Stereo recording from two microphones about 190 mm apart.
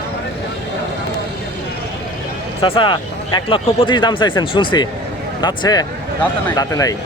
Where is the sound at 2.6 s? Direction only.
25° left (ahead or behind).